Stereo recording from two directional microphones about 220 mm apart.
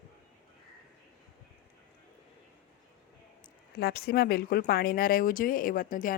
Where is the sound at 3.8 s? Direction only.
45° left (ahead or behind).